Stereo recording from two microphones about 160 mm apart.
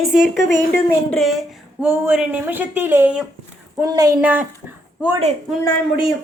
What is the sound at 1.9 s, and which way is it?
Speech, 10° right (ahead or behind).